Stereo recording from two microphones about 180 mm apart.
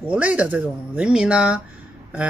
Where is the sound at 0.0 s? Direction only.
5° right (ahead or behind).